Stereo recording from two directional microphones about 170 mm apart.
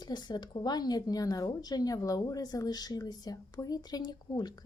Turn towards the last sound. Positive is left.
turn(degrees=25)  # may be behind; listen again after turning